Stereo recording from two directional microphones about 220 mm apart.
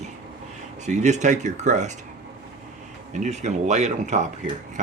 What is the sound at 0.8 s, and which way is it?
Speech, 30° right (ahead or behind).